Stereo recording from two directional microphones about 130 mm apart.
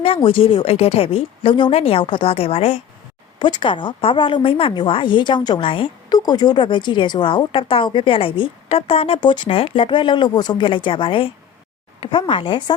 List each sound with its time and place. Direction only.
0.0 s speech: 45° left (ahead or behind)
3.3 s a woman's voice: 35° left (ahead or behind)